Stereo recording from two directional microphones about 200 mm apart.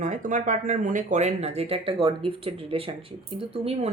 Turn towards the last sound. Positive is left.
turn(degrees=-30)  # may be behind; listen again after turning